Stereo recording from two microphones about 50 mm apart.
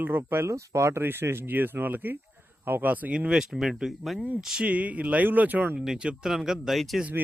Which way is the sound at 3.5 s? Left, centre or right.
Centre.